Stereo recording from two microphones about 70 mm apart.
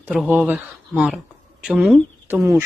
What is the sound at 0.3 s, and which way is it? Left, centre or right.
Speech, right.